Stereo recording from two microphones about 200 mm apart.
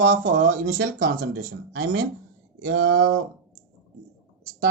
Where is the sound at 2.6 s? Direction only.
70° right (ahead or behind).